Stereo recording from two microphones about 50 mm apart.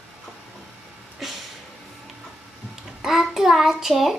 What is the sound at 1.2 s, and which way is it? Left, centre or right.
Vehicle, centre.